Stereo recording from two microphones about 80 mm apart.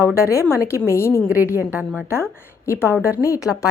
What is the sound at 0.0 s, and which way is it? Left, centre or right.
A woman's voice, left.